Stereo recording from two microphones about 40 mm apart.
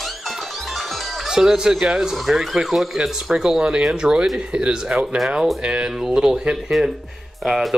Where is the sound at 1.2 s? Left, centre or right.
Centre.